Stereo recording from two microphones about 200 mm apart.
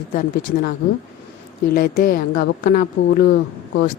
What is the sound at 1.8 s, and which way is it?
Speech, 50° left (ahead or behind).